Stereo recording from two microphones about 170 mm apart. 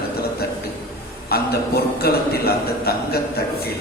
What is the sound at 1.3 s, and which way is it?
A man's voice, 65° left (ahead or behind).